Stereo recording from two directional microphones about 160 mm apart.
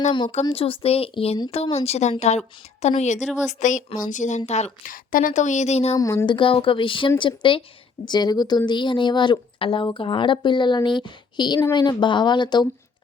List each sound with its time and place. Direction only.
0.4 s a woman's voice: 35° left (ahead or behind)
4.9 s a woman's voice: 55° left (ahead or behind); by 6.0 s 40° left (ahead or behind)
6.0 s speech: 20° left (ahead or behind)